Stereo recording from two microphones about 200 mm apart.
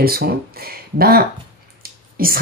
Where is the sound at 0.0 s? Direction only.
50° right (ahead or behind).